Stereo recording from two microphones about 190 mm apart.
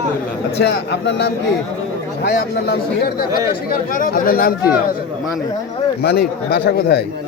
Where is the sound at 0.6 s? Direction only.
65° left (ahead or behind).